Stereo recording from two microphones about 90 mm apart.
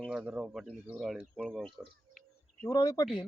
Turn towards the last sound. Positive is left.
turn(degrees=40)  # may be behind; listen again after turning